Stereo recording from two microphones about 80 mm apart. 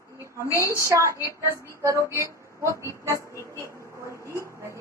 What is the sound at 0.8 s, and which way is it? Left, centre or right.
Speech, right.